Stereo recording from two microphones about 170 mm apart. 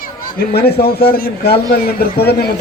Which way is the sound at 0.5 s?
70° left (ahead or behind).